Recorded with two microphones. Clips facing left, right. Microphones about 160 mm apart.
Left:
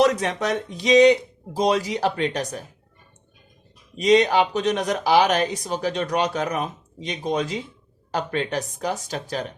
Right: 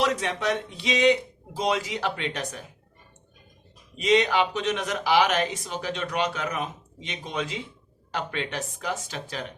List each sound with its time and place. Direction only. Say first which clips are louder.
0.0 s speech: left 5 dB; 40° left (ahead or behind)
3.9 s speech: left 5 dB; 40° left (ahead or behind)